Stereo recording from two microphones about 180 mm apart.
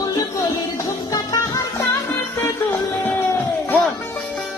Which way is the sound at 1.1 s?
20° left (ahead or behind).